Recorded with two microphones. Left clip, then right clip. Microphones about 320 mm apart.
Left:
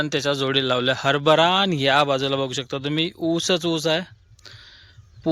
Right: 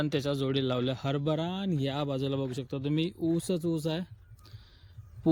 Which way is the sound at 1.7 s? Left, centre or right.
Centre.